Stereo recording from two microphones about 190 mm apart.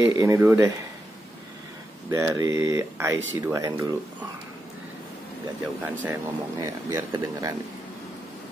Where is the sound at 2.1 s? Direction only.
15° right (ahead or behind).